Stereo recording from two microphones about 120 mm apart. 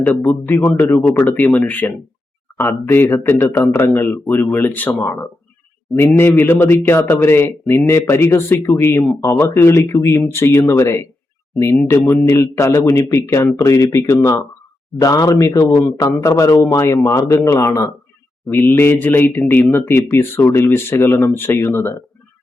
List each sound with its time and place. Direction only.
0.0 s a man's voice: 15° left (ahead or behind)